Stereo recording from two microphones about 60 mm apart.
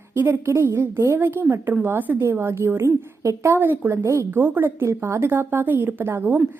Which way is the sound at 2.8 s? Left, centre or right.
Right.